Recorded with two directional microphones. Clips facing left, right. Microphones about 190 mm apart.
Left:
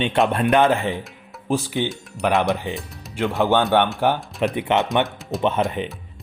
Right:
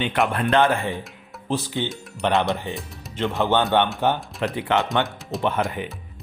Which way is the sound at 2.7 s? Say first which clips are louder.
Left 2 dB; 15° left (ahead or behind).